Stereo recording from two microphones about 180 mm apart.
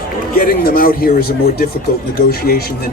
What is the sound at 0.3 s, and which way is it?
Speech, 55° left (ahead or behind).